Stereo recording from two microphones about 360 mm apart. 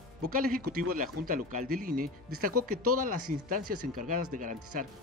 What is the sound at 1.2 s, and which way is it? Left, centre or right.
Speech, right.